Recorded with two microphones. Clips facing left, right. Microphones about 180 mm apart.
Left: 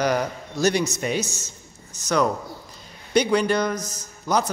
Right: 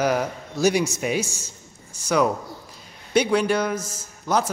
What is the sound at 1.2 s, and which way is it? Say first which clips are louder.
Speech: left 1 dB; 30° right (ahead or behind).